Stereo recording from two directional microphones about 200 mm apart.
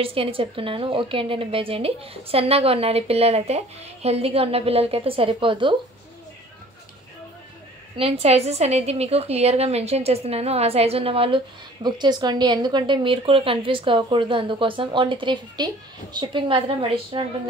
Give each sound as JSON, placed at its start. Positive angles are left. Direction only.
{"t": 0.0, "sound": "a woman's voice", "side_deg": -30}
{"t": 8.0, "sound": "a woman's voice", "side_deg": -30}